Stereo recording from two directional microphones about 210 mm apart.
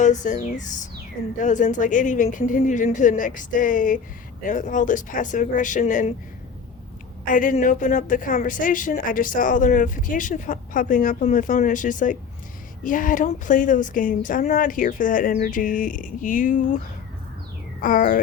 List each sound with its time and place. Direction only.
0.0 s a woman's voice: 35° left (ahead or behind)
7.3 s a woman's voice: 40° left (ahead or behind)
17.7 s a sound: 40° left (ahead or behind)